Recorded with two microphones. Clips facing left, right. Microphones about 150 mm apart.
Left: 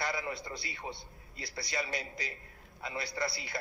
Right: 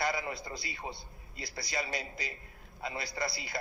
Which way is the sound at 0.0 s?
15° right (ahead or behind).